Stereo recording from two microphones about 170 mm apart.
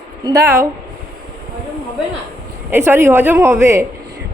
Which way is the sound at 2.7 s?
15° right (ahead or behind).